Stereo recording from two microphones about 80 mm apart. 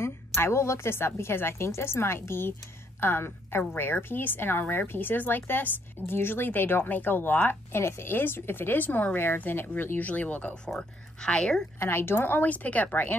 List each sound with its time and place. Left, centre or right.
0.0 s a woman's voice: left; by 11.6 s centre
11.8 s a woman's voice: left